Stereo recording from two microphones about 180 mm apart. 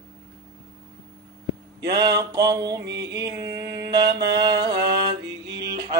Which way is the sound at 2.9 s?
70° right (ahead or behind).